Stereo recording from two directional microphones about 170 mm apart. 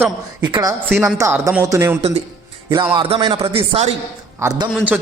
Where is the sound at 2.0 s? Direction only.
35° right (ahead or behind).